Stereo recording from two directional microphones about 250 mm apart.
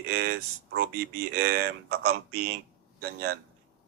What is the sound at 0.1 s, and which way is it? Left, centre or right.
Speech, right.